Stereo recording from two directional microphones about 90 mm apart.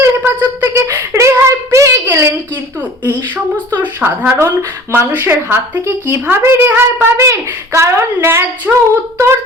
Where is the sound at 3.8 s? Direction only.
20° right (ahead or behind).